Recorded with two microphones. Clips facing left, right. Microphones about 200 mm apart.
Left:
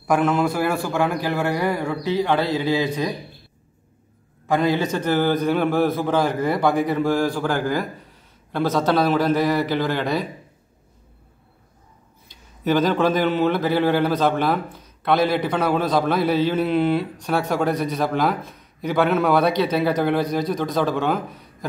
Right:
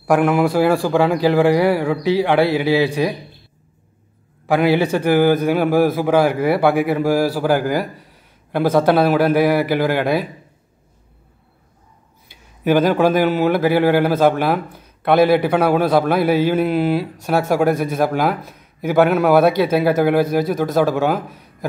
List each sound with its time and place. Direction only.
0.5 s speech: 90° right
1.9 s a man's voice: 15° right (ahead or behind)
2.6 s a man's voice: 75° right (ahead or behind)
5.0 s a man's voice: 10° right (ahead or behind)
12.3 s a man's voice: 10° right (ahead or behind)